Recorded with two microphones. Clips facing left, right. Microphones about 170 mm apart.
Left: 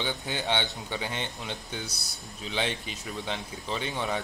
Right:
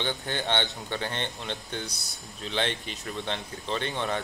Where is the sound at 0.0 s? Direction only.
10° left (ahead or behind).